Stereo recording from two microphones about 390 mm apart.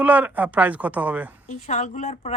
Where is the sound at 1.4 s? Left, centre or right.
Centre.